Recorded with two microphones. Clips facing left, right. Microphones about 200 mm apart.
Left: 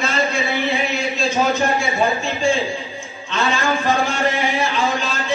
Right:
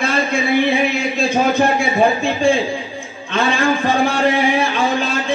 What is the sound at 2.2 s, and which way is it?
A man's voice, 55° right (ahead or behind).